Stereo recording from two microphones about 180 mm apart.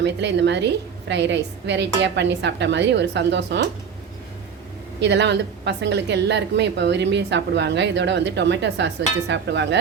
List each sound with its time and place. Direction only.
0.0 s a woman's voice: 75° right (ahead or behind)
4.9 s a woman's voice: 75° right (ahead or behind)